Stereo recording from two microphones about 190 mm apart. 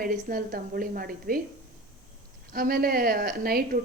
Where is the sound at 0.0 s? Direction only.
50° right (ahead or behind).